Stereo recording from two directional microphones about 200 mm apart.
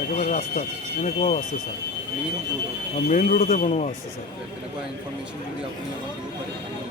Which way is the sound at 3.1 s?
40° left (ahead or behind).